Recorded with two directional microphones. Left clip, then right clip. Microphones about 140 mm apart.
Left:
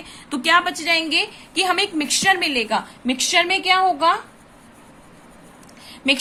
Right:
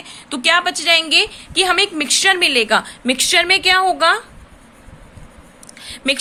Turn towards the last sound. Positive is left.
turn(degrees=-45)  # may be behind; listen again after turning